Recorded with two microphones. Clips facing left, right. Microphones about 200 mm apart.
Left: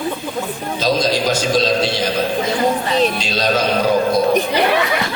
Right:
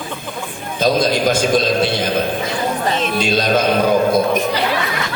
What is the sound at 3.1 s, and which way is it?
Speech, 50° right (ahead or behind).